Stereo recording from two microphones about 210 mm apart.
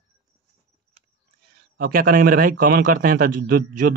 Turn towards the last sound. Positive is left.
turn(degrees=-40)  # may be behind; listen again after turning